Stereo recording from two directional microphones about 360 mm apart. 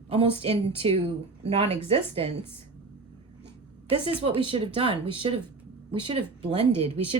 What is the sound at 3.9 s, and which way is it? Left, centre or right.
Speech, centre.